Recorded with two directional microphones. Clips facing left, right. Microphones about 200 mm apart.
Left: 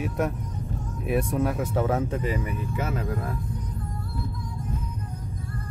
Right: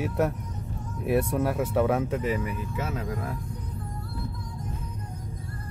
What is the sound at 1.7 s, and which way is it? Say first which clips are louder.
Speech: right 3 dB; 25° left (ahead or behind).